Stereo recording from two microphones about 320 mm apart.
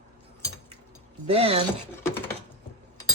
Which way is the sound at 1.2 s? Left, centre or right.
Centre.